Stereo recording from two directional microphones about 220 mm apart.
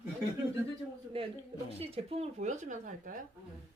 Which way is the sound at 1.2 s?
25° right (ahead or behind).